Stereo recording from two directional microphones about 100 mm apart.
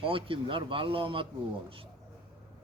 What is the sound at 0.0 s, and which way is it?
Speech, 65° right (ahead or behind).